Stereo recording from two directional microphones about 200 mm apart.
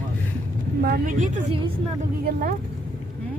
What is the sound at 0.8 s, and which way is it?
Speech, 50° right (ahead or behind).